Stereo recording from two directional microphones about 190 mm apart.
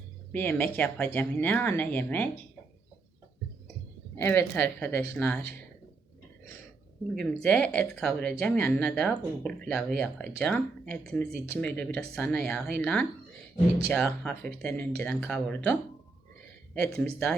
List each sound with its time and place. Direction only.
0.3 s speech: 10° left (ahead or behind)
4.2 s speech: 10° left (ahead or behind)
7.2 s speech: 5° left (ahead or behind)
16.8 s speech: 5° left (ahead or behind)